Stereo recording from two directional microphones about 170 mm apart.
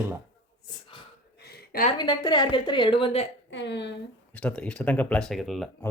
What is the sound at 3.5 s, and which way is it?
Speech, 90° left.